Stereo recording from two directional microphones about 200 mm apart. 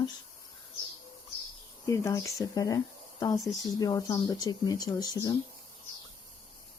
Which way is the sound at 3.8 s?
20° left (ahead or behind).